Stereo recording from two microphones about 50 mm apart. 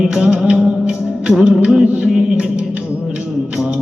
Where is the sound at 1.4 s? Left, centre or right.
Centre.